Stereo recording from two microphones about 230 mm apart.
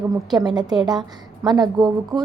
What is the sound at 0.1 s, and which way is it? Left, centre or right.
A woman's voice, centre.